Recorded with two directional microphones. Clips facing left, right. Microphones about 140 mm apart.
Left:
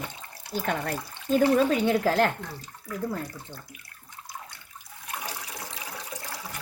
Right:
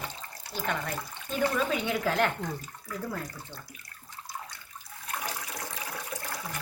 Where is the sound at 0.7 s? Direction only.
45° left (ahead or behind).